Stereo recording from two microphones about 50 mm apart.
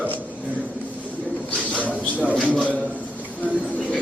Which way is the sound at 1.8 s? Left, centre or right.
Left.